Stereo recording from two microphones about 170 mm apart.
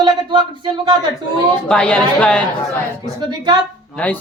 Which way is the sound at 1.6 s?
5° left (ahead or behind).